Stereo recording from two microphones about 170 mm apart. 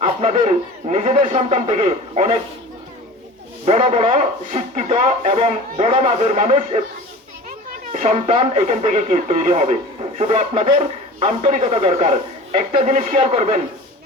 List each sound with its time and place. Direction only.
0.0 s speech: 35° right (ahead or behind)
3.7 s speech: 40° right (ahead or behind)
7.9 s speech: 40° right (ahead or behind)